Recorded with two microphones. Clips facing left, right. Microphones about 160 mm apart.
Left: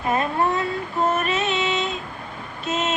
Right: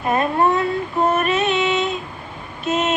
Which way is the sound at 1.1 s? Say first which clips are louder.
Right 4 dB; 60° right (ahead or behind).